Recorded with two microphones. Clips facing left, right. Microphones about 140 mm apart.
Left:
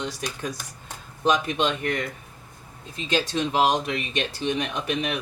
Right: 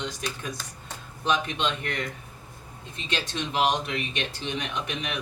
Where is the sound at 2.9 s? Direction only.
40° left (ahead or behind).